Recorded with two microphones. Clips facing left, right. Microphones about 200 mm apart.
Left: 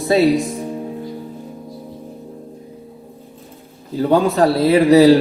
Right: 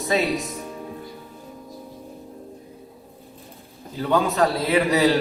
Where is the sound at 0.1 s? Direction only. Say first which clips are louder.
Left 9 dB; 30° left (ahead or behind).